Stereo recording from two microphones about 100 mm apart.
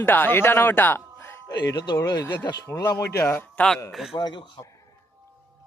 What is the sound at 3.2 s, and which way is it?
Speech, 20° left (ahead or behind).